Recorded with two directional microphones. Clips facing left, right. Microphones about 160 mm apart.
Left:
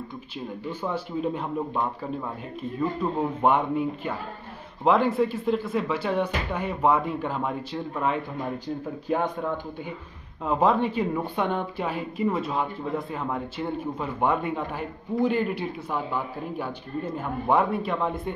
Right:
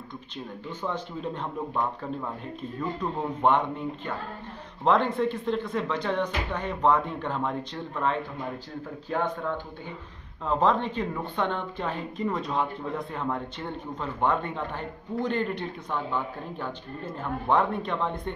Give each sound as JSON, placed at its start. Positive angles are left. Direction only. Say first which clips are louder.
{"t": 0.7, "sound": "a woman's voice", "louder": "left 2 dB", "side_deg": 10}
{"t": 2.8, "sound": "a woman's voice", "louder": "left 4 dB", "side_deg": 10}